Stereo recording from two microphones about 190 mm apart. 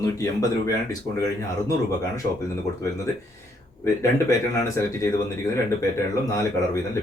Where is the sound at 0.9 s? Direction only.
15° left (ahead or behind).